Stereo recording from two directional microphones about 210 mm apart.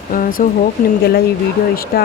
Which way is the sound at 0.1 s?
40° left (ahead or behind).